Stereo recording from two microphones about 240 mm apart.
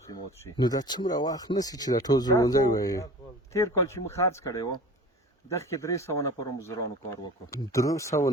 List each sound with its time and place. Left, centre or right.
0.1 s speech: centre